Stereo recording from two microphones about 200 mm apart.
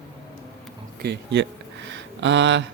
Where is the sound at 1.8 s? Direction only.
65° right (ahead or behind).